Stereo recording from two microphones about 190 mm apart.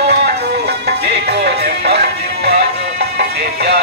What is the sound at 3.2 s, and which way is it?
Music, 60° right (ahead or behind).